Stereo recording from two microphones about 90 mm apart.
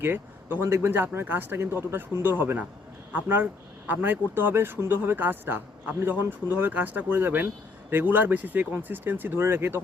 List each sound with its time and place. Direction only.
0.0 s speech: 25° right (ahead or behind)